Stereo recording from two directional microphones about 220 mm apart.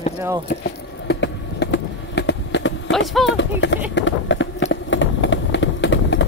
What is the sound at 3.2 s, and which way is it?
Speech, 55° left (ahead or behind).